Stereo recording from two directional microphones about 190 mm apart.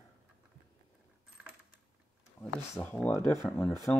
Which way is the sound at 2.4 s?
5° left (ahead or behind).